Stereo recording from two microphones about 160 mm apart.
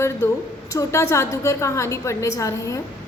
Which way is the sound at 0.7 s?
20° left (ahead or behind).